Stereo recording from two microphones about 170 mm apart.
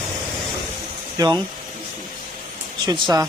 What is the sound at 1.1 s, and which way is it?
Speech, 25° right (ahead or behind).